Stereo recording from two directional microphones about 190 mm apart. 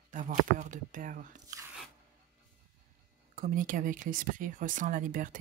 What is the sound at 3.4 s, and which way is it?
Speech, 45° right (ahead or behind).